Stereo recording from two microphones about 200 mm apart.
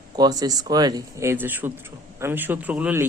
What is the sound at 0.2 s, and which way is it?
Speech, 20° right (ahead or behind).